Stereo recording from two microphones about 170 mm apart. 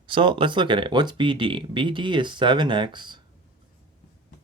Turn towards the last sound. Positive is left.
turn(degrees=-25)  # may be behind; listen again after turning